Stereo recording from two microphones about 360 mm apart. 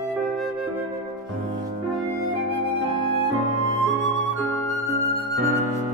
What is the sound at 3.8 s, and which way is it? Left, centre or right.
Music, centre.